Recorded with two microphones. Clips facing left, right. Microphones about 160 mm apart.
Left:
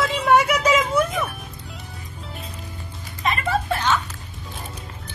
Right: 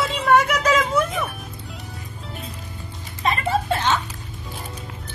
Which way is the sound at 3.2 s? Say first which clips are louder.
Right 1 dB; 30° right (ahead or behind).